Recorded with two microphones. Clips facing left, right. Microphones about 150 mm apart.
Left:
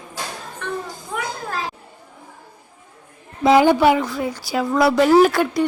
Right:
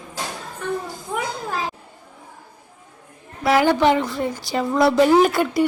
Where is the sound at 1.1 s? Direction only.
15° right (ahead or behind).